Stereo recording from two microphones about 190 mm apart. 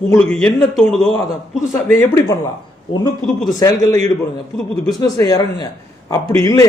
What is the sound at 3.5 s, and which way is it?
Speech, 20° left (ahead or behind).